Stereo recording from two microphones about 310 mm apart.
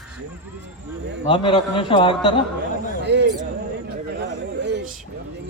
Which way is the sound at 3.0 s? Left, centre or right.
Right.